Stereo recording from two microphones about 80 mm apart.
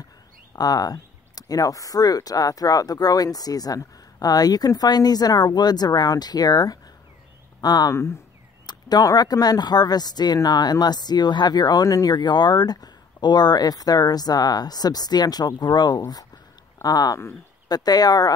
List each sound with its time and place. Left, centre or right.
0.6 s speech: left